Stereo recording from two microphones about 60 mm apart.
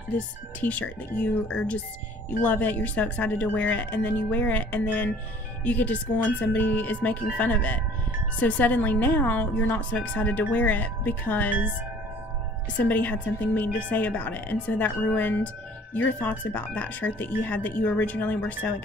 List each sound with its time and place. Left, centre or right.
0.6 s speech: left
12.7 s speech: left